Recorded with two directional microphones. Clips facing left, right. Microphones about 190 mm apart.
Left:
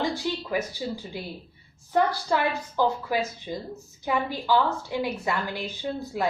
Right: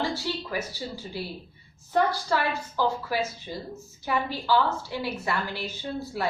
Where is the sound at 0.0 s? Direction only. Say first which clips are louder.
Left 2 dB; 15° left (ahead or behind).